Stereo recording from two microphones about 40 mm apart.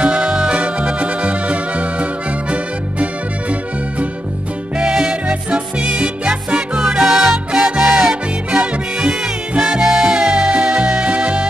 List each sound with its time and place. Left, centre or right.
0.0 s music: right
4.7 s music: right
7.1 s music: centre; by 11.4 s right